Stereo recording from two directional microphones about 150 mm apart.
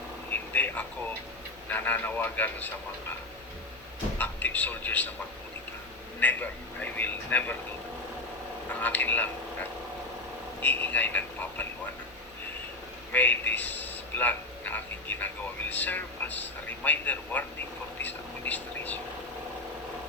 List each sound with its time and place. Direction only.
0.3 s a sound: 10° left (ahead or behind)
1.7 s a man's voice: 10° left (ahead or behind)
4.2 s a man's voice: 10° left (ahead or behind)
6.1 s a man's voice: 10° left (ahead or behind)
8.7 s a man's voice: 10° left (ahead or behind)
10.6 s a man's voice: 10° left (ahead or behind)
13.1 s a man's voice: 10° left (ahead or behind)